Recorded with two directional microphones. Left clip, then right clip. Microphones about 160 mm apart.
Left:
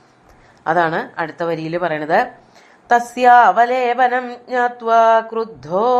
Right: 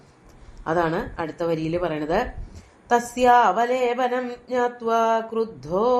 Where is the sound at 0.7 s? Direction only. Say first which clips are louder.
Left 7 dB; 25° left (ahead or behind).